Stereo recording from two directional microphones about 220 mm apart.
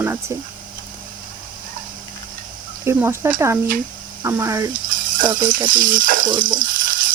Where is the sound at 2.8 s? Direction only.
10° right (ahead or behind).